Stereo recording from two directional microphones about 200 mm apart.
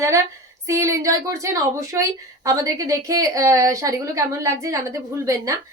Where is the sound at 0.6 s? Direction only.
15° right (ahead or behind).